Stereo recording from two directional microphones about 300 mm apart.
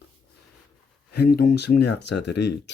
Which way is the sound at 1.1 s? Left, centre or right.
Left.